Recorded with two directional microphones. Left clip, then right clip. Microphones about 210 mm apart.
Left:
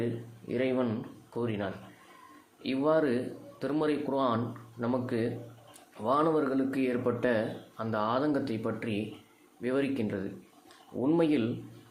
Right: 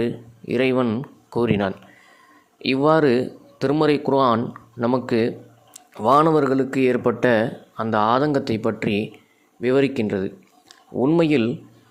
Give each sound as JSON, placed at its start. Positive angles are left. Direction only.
{"t": 0.0, "sound": "speech", "side_deg": -35}